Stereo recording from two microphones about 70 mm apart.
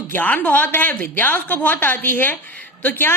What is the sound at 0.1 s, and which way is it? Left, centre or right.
A woman's voice, left.